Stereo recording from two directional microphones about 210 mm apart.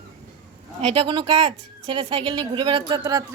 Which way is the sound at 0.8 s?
25° right (ahead or behind).